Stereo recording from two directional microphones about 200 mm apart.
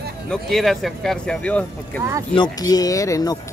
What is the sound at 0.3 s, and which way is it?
Speech, centre (ahead or behind).